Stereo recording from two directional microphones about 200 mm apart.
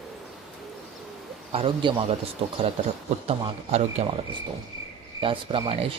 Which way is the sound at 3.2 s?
30° right (ahead or behind).